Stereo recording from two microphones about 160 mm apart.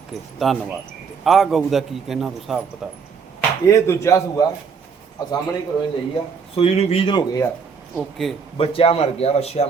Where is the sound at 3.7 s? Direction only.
15° left (ahead or behind).